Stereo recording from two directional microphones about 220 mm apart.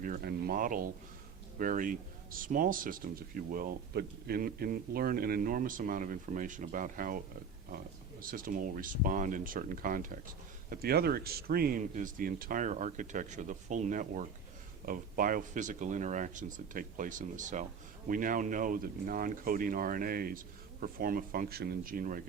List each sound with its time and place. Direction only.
0.0 s speech: 40° right (ahead or behind)
8.2 s speech: 40° right (ahead or behind)